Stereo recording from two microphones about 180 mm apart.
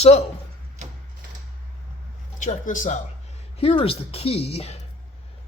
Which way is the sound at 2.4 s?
45° left (ahead or behind).